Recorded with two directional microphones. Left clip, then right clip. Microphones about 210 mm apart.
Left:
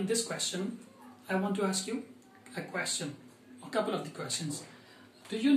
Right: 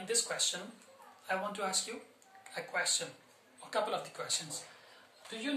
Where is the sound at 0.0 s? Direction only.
20° right (ahead or behind).